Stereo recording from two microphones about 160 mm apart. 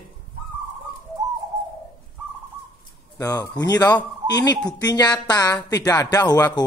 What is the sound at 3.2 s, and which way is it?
Speech, 20° left (ahead or behind).